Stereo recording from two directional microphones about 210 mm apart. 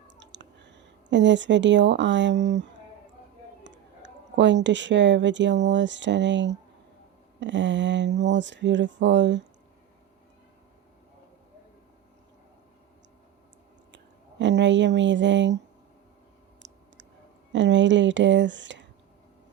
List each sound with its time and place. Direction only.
0.2 s speech: 60° right (ahead or behind)
13.9 s a sound: 60° right (ahead or behind)
16.6 s clicking: 60° right (ahead or behind)
17.5 s speech: 60° right (ahead or behind)